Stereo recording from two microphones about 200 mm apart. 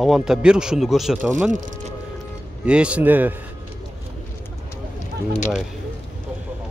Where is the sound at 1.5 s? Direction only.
40° right (ahead or behind).